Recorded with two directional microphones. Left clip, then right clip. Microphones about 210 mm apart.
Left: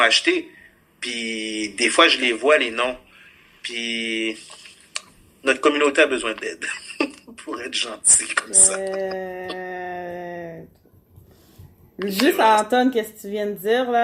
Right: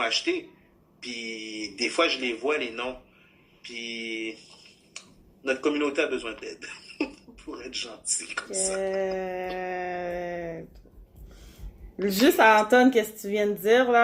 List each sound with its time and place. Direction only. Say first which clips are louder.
0.0 s speech: left 10 dB; 50° left (ahead or behind)
9.0 s a sound: left 2 dB; 5° left (ahead or behind)
12.2 s speech: left 2 dB; 10° left (ahead or behind)